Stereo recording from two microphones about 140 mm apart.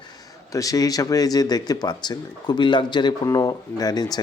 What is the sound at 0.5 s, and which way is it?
Speech, 25° left (ahead or behind).